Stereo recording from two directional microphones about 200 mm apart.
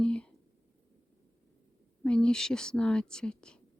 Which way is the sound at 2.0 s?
5° left (ahead or behind).